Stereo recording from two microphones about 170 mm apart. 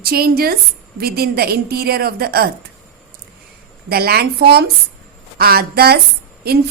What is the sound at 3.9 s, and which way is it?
A woman's voice, 65° right (ahead or behind).